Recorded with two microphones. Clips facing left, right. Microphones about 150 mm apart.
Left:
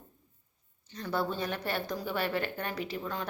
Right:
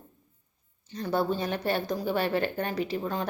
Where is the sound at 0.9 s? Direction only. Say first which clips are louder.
Right 5 dB; 25° right (ahead or behind).